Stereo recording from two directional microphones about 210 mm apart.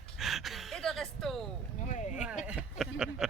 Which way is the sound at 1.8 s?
35° left (ahead or behind).